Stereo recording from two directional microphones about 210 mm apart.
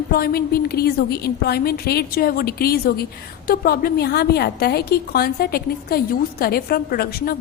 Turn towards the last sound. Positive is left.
turn(degrees=45)  # may be behind; listen again after turning